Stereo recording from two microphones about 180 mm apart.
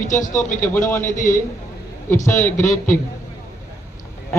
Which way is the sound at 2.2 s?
10° left (ahead or behind).